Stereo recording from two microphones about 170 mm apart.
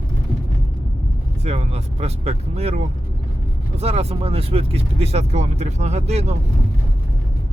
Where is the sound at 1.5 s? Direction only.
40° right (ahead or behind).